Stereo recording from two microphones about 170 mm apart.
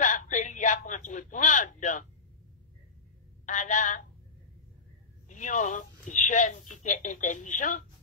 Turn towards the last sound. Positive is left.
turn(degrees=50)  # may be behind; listen again after turning